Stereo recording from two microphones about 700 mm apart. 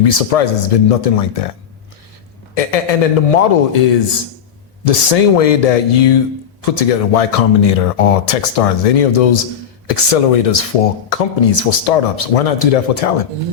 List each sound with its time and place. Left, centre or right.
0.0 s speech: left
2.6 s speech: left
4.9 s speech: left